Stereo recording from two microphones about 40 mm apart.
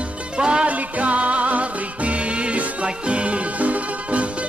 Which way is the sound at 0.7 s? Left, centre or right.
Right.